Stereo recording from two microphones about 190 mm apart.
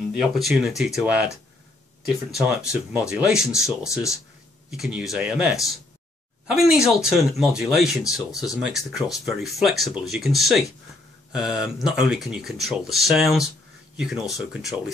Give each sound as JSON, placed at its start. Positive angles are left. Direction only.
{"t": 0.1, "sound": "speech", "side_deg": 0}
{"t": 2.3, "sound": "speech", "side_deg": -5}
{"t": 3.9, "sound": "speech", "side_deg": 15}
{"t": 4.6, "sound": "speech", "side_deg": -5}